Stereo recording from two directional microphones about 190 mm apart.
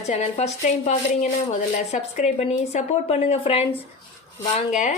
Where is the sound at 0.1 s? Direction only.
35° left (ahead or behind).